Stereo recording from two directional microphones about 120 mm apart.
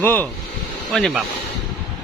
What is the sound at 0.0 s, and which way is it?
Speech, 15° left (ahead or behind).